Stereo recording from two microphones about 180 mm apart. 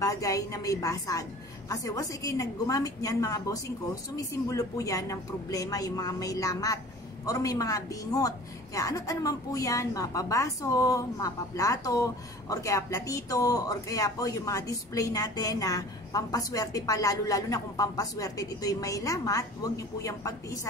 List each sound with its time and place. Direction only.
0.0 s a woman's voice: 20° left (ahead or behind)